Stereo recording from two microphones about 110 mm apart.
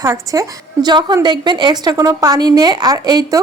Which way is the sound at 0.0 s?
30° right (ahead or behind).